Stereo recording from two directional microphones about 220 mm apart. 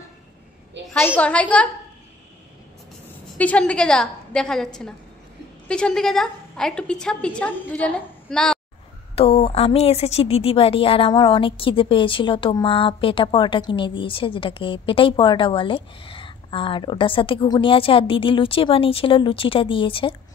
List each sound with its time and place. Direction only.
0.9 s a woman's voice: 5° left (ahead or behind)
3.3 s a woman's voice: 5° left (ahead or behind)
5.7 s a woman's voice: 5° left (ahead or behind)
9.1 s a woman's voice: 25° left (ahead or behind)